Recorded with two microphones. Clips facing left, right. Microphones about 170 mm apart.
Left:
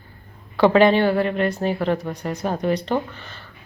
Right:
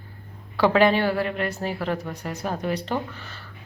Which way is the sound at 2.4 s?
25° left (ahead or behind).